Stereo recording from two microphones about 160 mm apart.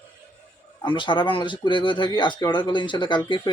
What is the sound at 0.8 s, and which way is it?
Speech, 30° left (ahead or behind).